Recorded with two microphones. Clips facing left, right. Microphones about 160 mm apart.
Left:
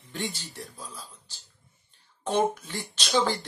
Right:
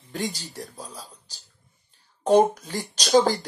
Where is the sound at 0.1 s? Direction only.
40° right (ahead or behind).